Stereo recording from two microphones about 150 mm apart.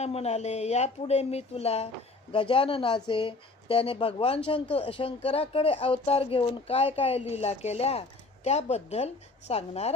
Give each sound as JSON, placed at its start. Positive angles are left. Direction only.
{"t": 0.0, "sound": "speech", "side_deg": 45}